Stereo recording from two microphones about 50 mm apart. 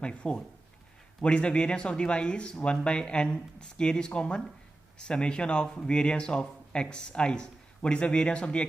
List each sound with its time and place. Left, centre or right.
0.0 s a man's voice: left